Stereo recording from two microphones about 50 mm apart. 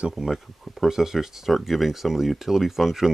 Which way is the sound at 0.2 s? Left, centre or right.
Centre.